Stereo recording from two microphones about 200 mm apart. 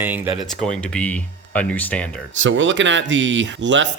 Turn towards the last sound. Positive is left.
turn(degrees=-65)  # may be behind; listen again after turning